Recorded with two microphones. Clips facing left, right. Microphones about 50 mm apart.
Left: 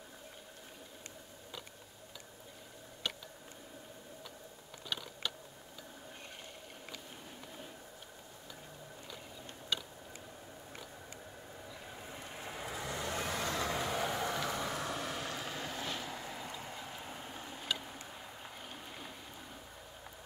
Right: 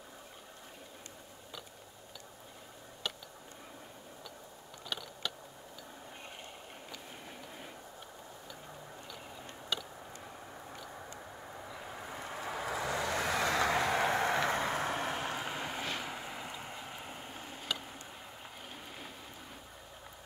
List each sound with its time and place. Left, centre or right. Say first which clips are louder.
4.8 s mechanisms: even; centre
11.9 s vehicle: right 6 dB; right
14.2 s vehicle: right 5 dB; right; by 17.6 s centre
17.7 s a sound: even; centre